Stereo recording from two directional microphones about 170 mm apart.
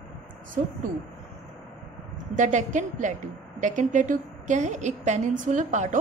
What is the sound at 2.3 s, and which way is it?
A woman's voice, 45° right (ahead or behind).